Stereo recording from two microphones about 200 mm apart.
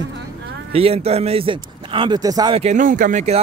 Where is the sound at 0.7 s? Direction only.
30° right (ahead or behind).